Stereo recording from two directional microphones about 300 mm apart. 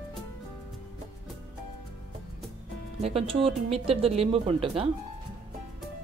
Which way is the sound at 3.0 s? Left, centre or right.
Centre.